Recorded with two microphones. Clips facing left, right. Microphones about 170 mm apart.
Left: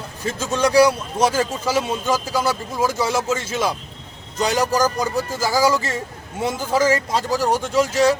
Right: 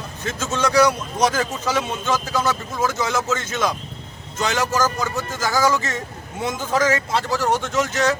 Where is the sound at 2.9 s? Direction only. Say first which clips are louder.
Left 1 dB; 30° left (ahead or behind).